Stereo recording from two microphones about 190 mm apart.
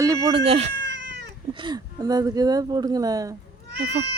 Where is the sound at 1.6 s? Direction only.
20° right (ahead or behind).